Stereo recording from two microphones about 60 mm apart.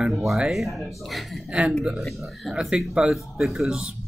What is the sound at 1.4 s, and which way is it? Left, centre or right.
Speech, centre.